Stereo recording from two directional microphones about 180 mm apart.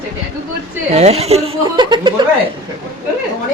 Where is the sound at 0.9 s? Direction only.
35° right (ahead or behind).